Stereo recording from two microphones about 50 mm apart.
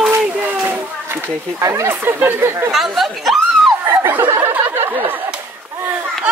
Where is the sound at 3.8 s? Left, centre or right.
Right.